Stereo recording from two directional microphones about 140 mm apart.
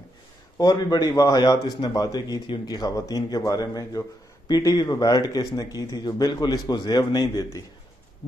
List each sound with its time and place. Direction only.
0.6 s a man's voice: 30° left (ahead or behind)